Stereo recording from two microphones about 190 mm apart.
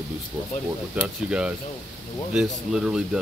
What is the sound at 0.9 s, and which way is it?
Speech, 5° right (ahead or behind).